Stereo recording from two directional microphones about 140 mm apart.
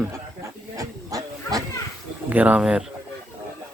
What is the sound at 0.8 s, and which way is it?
Goose, 25° right (ahead or behind).